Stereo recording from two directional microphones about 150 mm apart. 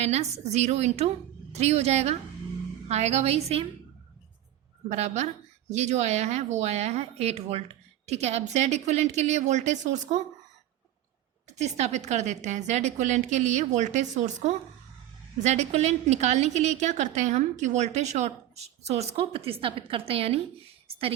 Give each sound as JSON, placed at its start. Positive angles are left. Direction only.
{"t": 0.0, "sound": "a woman's voice", "side_deg": -45}
{"t": 4.9, "sound": "a woman's voice", "side_deg": -50}
{"t": 11.5, "sound": "a woman's voice", "side_deg": -50}